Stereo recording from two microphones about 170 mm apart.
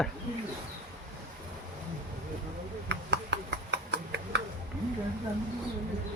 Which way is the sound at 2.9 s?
90° right.